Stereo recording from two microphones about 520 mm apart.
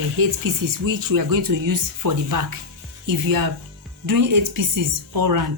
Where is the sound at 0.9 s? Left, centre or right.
Right.